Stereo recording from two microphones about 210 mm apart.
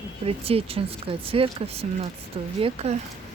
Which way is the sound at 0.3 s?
25° right (ahead or behind).